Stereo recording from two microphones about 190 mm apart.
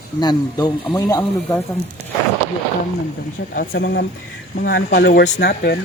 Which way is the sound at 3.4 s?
60° left (ahead or behind).